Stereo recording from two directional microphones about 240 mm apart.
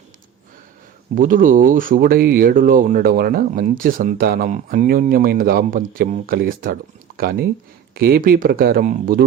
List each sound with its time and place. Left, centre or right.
1.1 s speech: right